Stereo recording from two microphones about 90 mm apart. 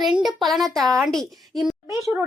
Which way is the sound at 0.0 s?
Centre (ahead or behind).